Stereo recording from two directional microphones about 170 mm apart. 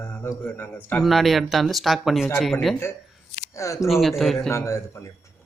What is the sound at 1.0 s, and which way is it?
Speech, centre (ahead or behind).